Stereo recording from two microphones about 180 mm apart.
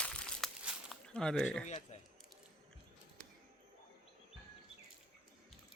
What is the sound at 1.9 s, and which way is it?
Speech, 40° left (ahead or behind).